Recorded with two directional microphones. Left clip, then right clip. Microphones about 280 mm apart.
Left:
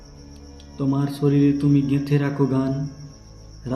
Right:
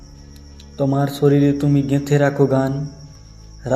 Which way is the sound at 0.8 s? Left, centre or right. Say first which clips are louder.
Right 6 dB; centre.